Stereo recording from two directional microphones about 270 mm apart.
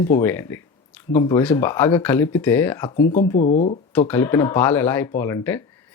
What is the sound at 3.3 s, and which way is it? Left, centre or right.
Speech, left.